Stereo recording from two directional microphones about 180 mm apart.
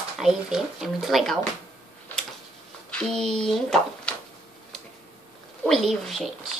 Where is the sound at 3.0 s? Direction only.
5° left (ahead or behind).